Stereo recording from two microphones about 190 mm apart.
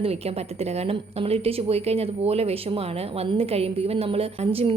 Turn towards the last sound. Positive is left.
turn(degrees=-30)  # may be behind; listen again after turning